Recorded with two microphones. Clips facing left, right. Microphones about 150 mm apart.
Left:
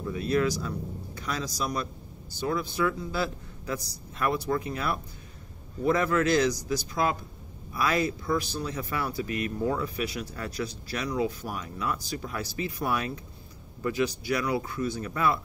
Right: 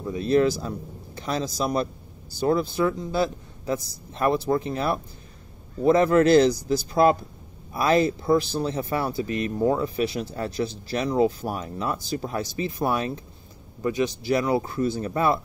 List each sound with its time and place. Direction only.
0.0 s speech: 25° right (ahead or behind)